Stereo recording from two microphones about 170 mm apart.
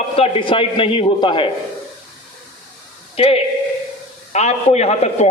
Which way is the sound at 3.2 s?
35° left (ahead or behind).